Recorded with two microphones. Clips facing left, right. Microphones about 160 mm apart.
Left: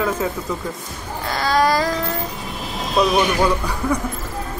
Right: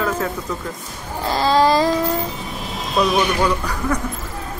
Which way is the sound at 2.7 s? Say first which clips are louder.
Left 1 dB; centre (ahead or behind).